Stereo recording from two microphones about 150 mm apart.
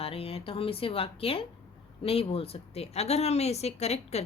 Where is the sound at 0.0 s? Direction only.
40° left (ahead or behind).